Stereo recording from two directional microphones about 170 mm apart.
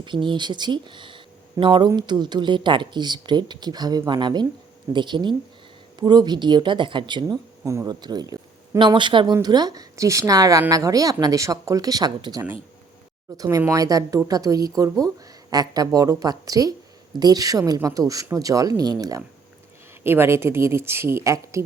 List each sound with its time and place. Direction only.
0.0 s a woman's voice: 30° right (ahead or behind)